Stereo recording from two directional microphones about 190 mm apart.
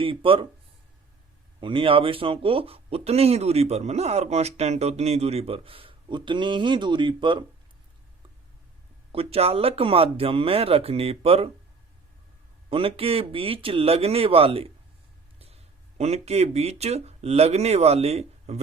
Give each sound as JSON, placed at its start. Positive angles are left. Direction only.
{"t": 0.0, "sound": "speech", "side_deg": -30}
{"t": 1.6, "sound": "speech", "side_deg": -25}
{"t": 9.1, "sound": "speech", "side_deg": -30}
{"t": 12.7, "sound": "speech", "side_deg": -30}